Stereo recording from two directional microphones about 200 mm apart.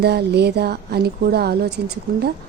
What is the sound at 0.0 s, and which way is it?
Speech, 55° right (ahead or behind).